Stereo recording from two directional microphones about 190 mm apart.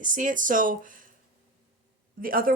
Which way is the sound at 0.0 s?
45° right (ahead or behind).